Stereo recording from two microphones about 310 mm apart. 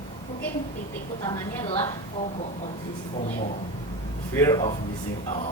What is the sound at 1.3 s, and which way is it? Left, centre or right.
Speech, centre.